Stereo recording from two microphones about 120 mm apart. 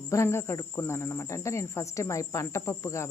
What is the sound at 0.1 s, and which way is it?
Speech, 20° left (ahead or behind).